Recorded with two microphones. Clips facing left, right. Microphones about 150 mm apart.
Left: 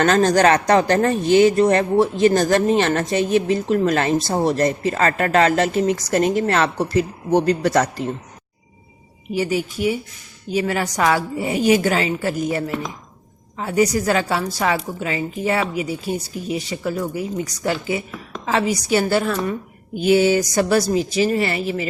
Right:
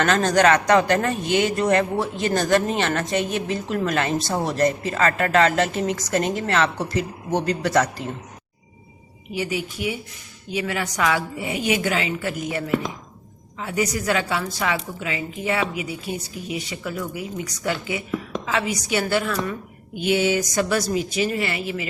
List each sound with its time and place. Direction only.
0.0 s speech: 35° left (ahead or behind)
9.3 s speech: 40° left (ahead or behind)